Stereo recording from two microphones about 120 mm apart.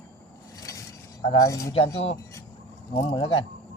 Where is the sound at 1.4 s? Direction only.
25° left (ahead or behind).